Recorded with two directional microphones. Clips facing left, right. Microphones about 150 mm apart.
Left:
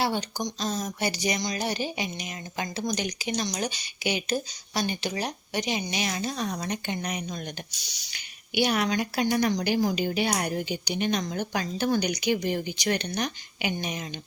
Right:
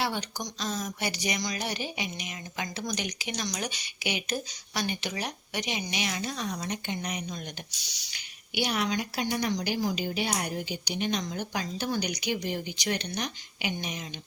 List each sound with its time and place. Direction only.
0.0 s a woman's voice: 35° left (ahead or behind); by 14.2 s 50° left (ahead or behind)